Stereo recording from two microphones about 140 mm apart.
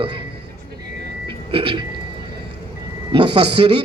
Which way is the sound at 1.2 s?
40° right (ahead or behind).